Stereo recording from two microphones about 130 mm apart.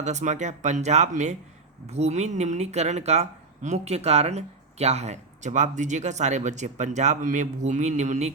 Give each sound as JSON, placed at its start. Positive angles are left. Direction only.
{"t": 0.0, "sound": "speech", "side_deg": -65}